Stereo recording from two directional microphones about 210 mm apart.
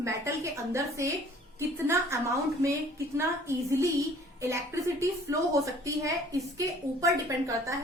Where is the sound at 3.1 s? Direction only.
15° right (ahead or behind).